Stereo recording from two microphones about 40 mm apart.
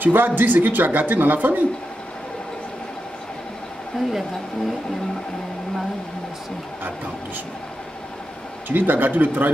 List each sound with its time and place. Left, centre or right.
0.0 s speech: right
3.9 s a woman's voice: centre
8.6 s speech: right